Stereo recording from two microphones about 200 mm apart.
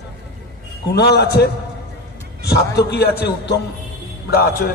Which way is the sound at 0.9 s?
55° left (ahead or behind).